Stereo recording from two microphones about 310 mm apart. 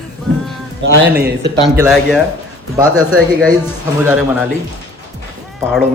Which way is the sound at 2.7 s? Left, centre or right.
Centre.